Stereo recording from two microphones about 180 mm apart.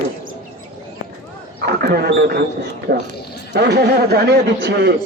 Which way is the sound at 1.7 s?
60° right (ahead or behind).